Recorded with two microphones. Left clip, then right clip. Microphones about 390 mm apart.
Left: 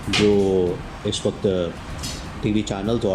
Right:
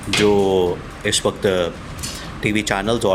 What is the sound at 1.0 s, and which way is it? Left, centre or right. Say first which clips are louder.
Speech: right 4 dB; centre.